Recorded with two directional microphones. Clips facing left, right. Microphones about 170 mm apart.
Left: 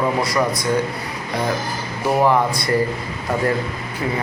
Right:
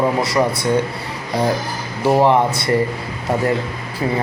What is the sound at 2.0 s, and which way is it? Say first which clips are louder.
Speech: right 3 dB; 25° right (ahead or behind).